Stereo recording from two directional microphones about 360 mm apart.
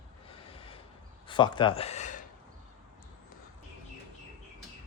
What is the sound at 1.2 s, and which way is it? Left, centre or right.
Speech, centre.